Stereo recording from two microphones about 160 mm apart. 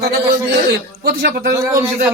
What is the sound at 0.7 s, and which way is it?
Speech, 80° right.